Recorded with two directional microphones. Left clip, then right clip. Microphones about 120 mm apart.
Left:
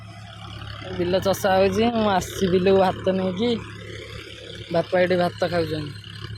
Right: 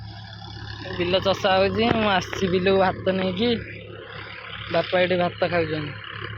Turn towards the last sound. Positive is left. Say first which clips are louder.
# right 1 dB
turn(degrees=30)  # may be behind; listen again after turning